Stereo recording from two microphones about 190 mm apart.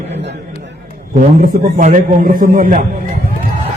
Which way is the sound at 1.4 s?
45° right (ahead or behind).